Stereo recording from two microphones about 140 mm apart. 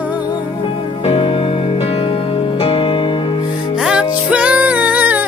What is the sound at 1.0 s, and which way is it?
Music, 40° left (ahead or behind).